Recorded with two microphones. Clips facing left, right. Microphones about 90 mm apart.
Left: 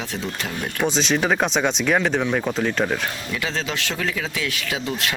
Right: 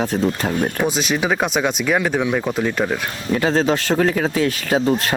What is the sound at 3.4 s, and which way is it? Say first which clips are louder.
Speech: right 10 dB; 40° right (ahead or behind).